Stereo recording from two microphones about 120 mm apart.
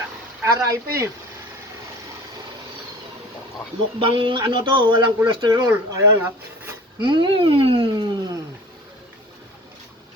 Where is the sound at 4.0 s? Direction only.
45° right (ahead or behind).